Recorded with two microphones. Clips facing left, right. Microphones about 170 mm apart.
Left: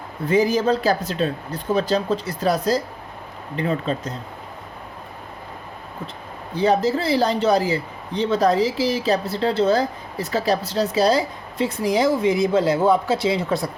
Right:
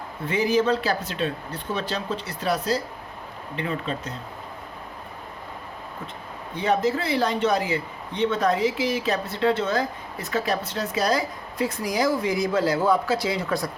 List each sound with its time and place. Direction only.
0.3 s speech: 40° left (ahead or behind)
6.5 s speech: 35° left (ahead or behind)